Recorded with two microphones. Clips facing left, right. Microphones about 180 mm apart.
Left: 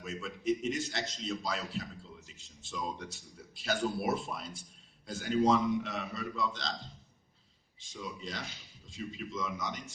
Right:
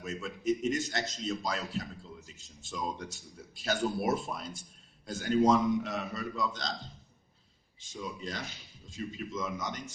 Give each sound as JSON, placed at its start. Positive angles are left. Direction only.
{"t": 0.0, "sound": "a man's voice", "side_deg": -45}
{"t": 7.8, "sound": "a man's voice", "side_deg": -50}